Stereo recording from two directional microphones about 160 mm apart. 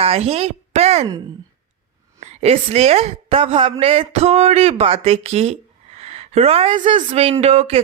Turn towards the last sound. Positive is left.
turn(degrees=-40)  # may be behind; listen again after turning